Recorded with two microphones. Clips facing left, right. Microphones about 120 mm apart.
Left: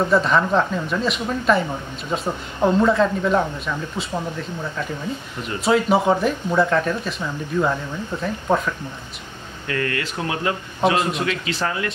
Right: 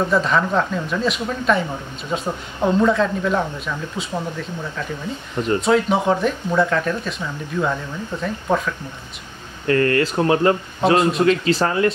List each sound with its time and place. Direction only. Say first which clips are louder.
0.1 s speech: left 1 dB; centre (ahead or behind)
5.6 s speech: left 2 dB; 5° left (ahead or behind)
9.7 s speech: right 8 dB; 40° right (ahead or behind)